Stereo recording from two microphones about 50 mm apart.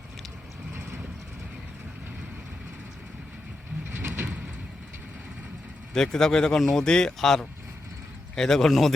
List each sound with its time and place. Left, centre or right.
3.9 s vehicle: right
5.9 s speech: centre